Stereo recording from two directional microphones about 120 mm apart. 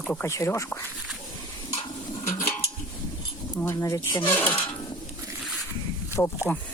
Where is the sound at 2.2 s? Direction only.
20° left (ahead or behind).